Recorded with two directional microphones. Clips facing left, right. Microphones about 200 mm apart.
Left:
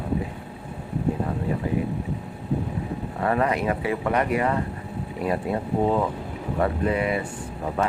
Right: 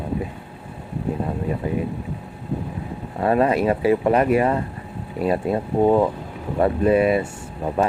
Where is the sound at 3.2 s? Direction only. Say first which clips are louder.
Right 5 dB; 25° right (ahead or behind).